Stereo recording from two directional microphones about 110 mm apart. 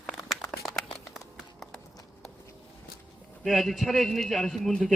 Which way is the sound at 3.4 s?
Centre (ahead or behind).